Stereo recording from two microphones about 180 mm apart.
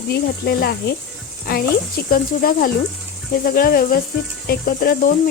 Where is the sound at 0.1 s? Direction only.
60° left (ahead or behind).